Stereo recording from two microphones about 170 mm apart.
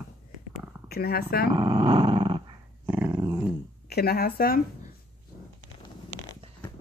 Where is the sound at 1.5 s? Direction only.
25° right (ahead or behind).